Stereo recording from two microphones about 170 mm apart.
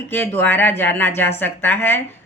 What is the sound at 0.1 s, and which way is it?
Speech, 10° left (ahead or behind).